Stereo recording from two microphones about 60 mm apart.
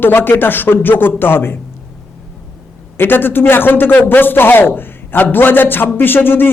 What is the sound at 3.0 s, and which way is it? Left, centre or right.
Speech, left.